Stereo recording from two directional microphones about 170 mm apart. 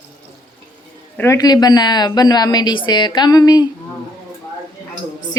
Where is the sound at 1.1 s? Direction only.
15° left (ahead or behind).